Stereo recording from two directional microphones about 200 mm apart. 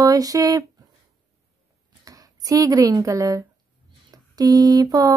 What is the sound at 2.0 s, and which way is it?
Speech, 20° right (ahead or behind).